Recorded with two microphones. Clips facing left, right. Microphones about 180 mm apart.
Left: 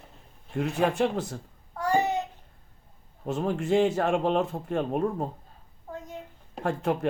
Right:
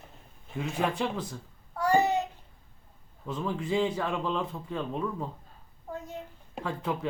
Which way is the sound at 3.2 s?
70° left (ahead or behind).